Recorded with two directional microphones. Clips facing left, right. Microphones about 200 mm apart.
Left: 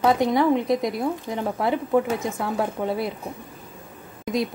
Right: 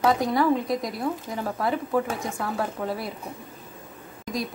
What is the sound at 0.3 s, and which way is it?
Speech, 25° left (ahead or behind).